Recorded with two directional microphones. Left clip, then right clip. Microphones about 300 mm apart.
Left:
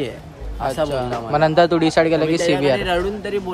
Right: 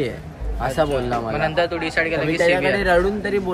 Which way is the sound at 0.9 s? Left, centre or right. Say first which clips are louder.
Left 1 dB; centre.